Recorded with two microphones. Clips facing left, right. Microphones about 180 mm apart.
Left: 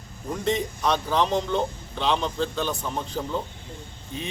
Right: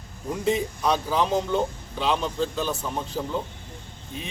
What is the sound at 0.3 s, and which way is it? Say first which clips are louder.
A man's voice: right 1 dB; 5° right (ahead or behind).